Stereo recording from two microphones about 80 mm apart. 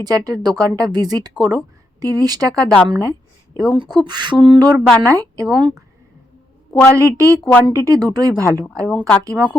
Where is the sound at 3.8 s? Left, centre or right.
Right.